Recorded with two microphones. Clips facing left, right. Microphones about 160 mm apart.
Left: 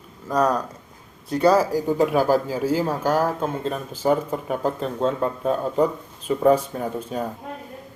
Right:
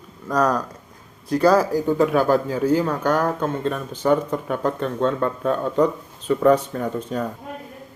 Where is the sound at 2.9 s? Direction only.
35° left (ahead or behind).